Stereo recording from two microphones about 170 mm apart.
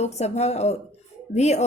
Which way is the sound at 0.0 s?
40° left (ahead or behind).